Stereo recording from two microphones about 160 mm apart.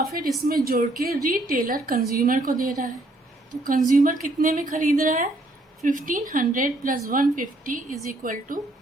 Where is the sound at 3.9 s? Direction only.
55° right (ahead or behind).